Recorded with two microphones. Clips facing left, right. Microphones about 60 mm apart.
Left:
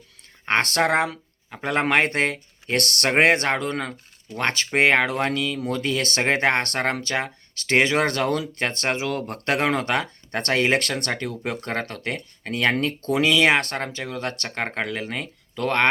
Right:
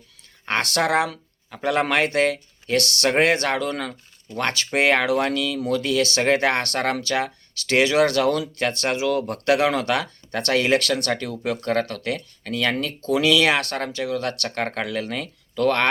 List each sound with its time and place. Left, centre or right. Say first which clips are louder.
0.4 s speech: left 1 dB; left
12.7 s speech: even; left
13.2 s speech: left 1 dB; left